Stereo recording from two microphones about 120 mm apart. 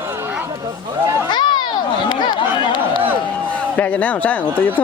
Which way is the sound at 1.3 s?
40° left (ahead or behind).